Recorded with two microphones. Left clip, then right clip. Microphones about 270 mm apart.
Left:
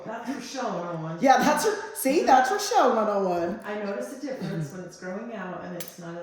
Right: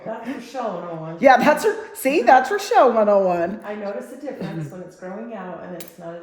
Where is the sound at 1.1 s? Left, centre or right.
Centre.